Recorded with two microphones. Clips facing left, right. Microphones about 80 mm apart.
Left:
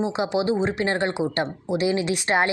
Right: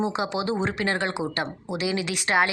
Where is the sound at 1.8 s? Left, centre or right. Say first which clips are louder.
Left 3 dB; left.